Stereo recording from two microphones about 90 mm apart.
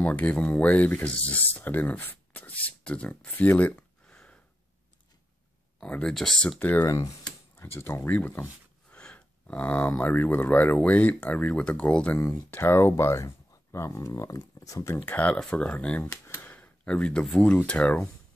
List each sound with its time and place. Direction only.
0.0 s speech: 15° left (ahead or behind)
5.8 s speech: 10° left (ahead or behind)
6.6 s speech: 20° left (ahead or behind)
15.0 s speech: 15° left (ahead or behind)